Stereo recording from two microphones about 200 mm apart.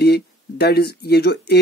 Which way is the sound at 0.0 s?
55° left (ahead or behind).